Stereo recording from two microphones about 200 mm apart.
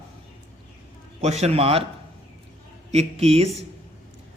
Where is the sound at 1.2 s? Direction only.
35° right (ahead or behind).